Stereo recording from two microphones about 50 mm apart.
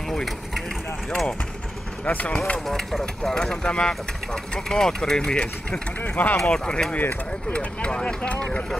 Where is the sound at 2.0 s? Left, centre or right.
Left.